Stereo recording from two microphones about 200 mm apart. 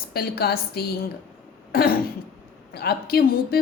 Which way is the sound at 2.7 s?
50° left (ahead or behind).